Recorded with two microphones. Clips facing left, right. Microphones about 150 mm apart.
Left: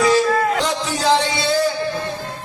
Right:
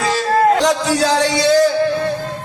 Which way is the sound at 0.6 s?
90° right.